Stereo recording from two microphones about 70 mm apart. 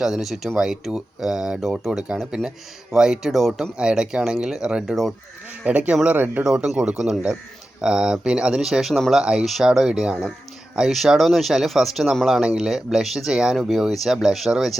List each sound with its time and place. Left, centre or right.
0.0 s speech: centre
5.6 s speech: centre
6.4 s speech: centre